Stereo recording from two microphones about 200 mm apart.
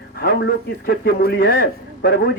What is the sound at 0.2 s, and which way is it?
A man's voice, 50° left (ahead or behind).